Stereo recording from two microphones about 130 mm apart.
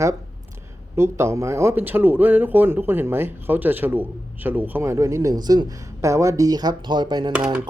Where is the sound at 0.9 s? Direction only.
20° right (ahead or behind).